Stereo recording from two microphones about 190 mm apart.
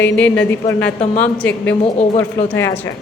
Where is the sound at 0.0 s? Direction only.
5° left (ahead or behind).